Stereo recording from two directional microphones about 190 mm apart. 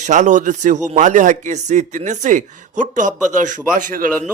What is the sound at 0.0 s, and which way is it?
A man's voice, 40° right (ahead or behind).